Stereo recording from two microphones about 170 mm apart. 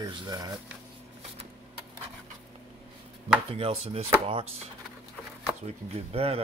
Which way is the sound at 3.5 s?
35° right (ahead or behind).